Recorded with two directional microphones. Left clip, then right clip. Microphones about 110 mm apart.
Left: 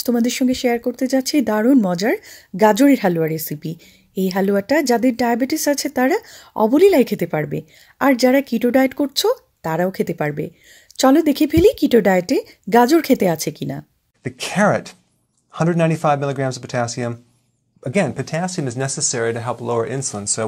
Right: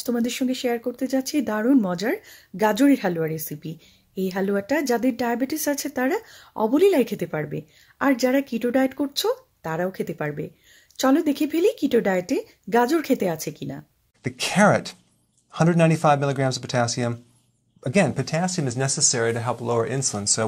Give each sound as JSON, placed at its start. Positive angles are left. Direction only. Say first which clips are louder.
{"t": 0.0, "sound": "speech", "louder": "left 6 dB", "side_deg": 45}
{"t": 14.2, "sound": "speech", "louder": "left 1 dB", "side_deg": 10}